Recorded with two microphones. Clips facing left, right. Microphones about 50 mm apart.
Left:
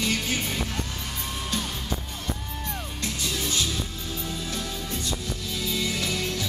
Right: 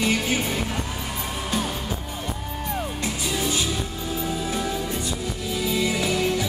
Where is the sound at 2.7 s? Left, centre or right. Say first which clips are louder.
Right 6 dB; centre.